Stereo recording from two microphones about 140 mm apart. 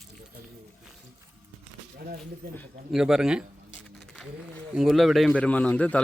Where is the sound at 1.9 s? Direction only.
90° right.